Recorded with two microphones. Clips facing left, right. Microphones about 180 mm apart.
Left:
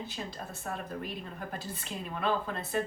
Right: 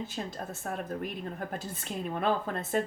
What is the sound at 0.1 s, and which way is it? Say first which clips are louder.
A woman's voice: right 3 dB; 45° right (ahead or behind).